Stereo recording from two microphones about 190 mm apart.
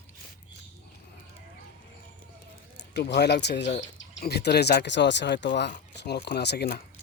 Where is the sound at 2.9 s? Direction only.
65° left (ahead or behind).